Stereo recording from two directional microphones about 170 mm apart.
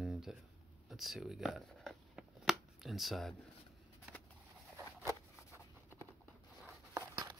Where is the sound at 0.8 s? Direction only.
Centre (ahead or behind).